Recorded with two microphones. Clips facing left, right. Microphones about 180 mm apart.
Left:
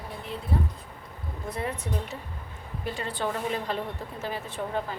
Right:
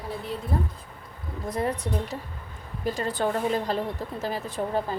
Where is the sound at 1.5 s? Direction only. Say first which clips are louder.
Right 5 dB; 40° right (ahead or behind).